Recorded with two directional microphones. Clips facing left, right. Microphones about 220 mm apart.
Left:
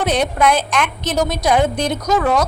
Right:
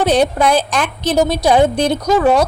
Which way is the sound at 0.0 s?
30° right (ahead or behind).